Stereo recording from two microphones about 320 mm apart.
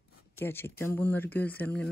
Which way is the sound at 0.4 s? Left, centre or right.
Centre.